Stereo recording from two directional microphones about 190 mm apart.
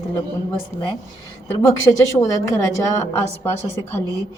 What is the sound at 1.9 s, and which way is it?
Speech, 15° left (ahead or behind).